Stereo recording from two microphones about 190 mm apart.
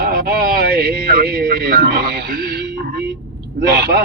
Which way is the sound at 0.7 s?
55° right (ahead or behind).